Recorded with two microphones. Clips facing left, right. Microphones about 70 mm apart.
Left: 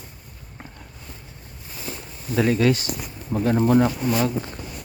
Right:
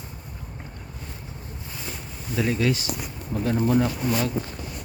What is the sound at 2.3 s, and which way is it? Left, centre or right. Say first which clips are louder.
Speech: left 4 dB; left.